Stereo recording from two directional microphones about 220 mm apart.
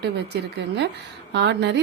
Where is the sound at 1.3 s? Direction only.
50° right (ahead or behind).